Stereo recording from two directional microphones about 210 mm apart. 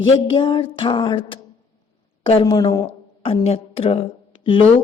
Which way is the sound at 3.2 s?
30° left (ahead or behind).